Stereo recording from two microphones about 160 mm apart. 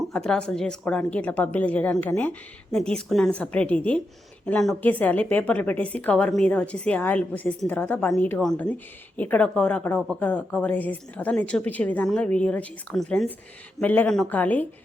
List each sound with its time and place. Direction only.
0.0 s a woman's voice: 5° left (ahead or behind)